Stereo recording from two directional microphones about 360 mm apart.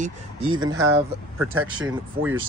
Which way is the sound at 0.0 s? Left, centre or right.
Centre.